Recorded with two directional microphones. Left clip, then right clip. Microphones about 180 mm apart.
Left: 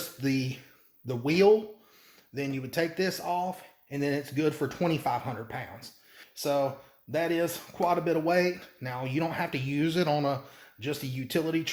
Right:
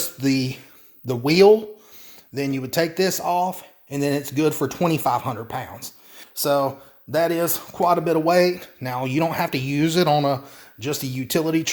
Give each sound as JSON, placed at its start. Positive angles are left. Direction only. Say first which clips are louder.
{"t": 0.0, "sound": "speech", "louder": "right 8 dB", "side_deg": -40}